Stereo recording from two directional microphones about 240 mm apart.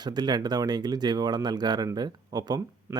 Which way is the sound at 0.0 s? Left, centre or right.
Centre.